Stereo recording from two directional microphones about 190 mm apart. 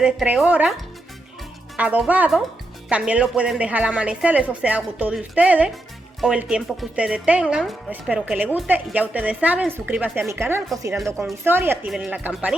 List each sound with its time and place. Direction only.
0.0 s speech: 5° right (ahead or behind)